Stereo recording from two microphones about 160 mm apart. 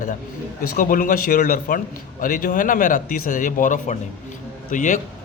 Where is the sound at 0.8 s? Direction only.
55° left (ahead or behind).